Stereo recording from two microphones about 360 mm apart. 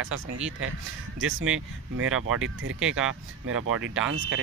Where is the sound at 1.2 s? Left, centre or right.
Right.